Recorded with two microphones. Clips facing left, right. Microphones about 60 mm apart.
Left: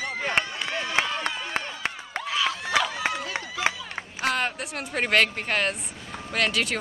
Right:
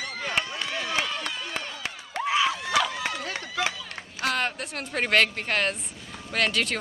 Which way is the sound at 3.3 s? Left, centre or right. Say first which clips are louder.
Left 2 dB; left.